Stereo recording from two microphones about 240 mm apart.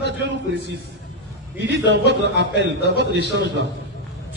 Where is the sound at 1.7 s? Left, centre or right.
Right.